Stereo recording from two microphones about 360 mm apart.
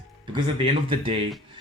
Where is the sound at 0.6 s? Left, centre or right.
Centre.